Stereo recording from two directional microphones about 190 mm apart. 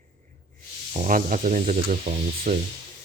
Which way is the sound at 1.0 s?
40° right (ahead or behind).